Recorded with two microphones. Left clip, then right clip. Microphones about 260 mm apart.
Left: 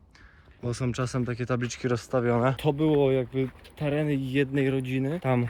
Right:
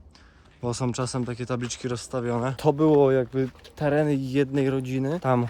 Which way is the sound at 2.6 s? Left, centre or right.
Right.